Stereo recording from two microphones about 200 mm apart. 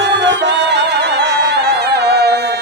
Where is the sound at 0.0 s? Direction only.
60° right (ahead or behind).